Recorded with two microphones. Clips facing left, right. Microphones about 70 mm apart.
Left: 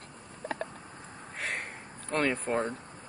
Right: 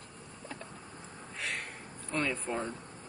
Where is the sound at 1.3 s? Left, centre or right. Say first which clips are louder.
Left 3 dB; left.